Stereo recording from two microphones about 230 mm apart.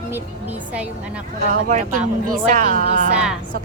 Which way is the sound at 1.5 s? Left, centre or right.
Right.